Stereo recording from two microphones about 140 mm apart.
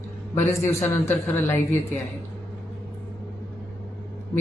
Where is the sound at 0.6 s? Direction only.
15° left (ahead or behind).